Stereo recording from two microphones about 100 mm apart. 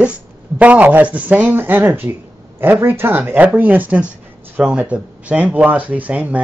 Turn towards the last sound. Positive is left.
turn(degrees=-15)  # may be behind; listen again after turning